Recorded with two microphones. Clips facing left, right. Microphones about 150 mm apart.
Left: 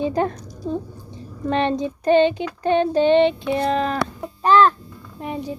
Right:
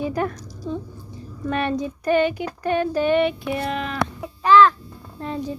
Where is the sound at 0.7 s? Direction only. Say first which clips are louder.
Left 3 dB; 40° left (ahead or behind).